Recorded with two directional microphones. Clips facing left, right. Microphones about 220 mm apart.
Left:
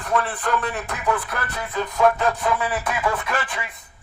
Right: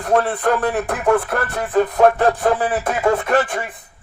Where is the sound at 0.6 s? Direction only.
55° right (ahead or behind).